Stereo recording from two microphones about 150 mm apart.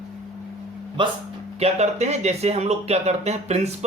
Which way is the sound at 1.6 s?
45° right (ahead or behind).